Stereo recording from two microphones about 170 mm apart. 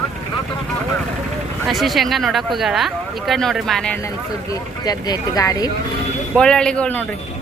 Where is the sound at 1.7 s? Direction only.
Centre (ahead or behind).